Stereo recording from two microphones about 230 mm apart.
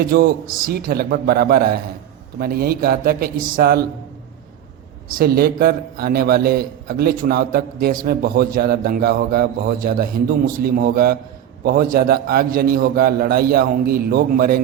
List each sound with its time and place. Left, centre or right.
0.0 s a man's voice: right
5.1 s a man's voice: right